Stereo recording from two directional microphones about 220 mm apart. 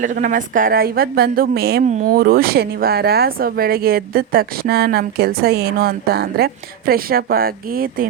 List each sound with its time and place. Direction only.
0.0 s speech: 35° right (ahead or behind)